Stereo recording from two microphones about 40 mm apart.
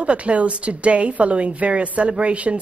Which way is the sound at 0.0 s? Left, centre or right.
Right.